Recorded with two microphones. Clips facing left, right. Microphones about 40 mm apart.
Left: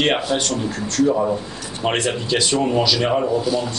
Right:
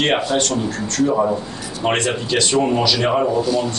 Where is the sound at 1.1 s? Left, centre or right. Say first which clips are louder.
Right 3 dB; centre.